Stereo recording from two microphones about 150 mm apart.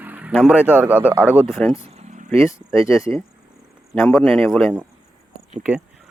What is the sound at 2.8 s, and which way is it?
Speech, 20° left (ahead or behind).